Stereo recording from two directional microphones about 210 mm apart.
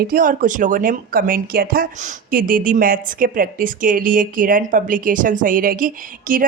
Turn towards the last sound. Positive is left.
turn(degrees=-40)  # may be behind; listen again after turning